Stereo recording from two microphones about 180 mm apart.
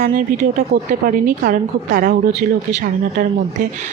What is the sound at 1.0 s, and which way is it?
Speech, 50° right (ahead or behind).